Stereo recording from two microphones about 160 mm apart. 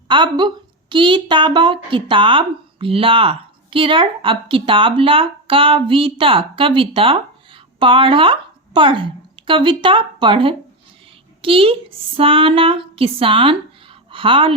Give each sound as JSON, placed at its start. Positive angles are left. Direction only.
{"t": 0.1, "sound": "a woman's voice", "side_deg": -30}